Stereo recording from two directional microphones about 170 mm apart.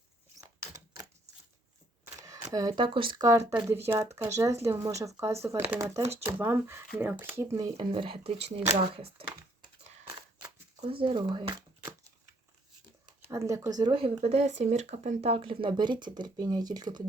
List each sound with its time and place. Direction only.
2.2 s speech: 20° right (ahead or behind)
10.8 s speech: 30° right (ahead or behind)
13.2 s speech: 20° right (ahead or behind)